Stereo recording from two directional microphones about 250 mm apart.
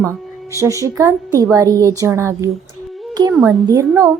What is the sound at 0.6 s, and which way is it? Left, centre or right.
A woman's voice, centre.